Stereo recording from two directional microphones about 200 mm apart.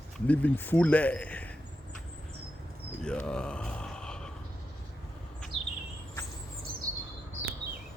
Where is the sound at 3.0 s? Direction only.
5° left (ahead or behind).